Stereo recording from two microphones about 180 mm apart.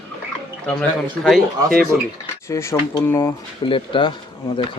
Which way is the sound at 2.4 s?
15° left (ahead or behind).